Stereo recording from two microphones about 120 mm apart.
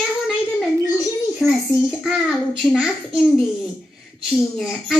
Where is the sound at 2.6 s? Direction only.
Centre (ahead or behind).